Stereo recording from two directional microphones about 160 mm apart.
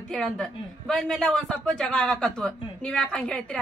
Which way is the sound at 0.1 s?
5° left (ahead or behind).